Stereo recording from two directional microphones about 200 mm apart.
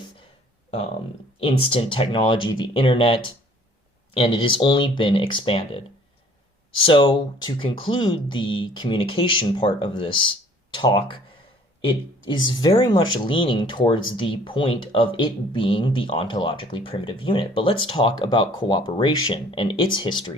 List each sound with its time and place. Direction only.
1.4 s speech: 25° left (ahead or behind)